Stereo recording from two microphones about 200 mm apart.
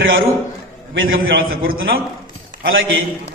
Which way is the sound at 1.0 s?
45° right (ahead or behind).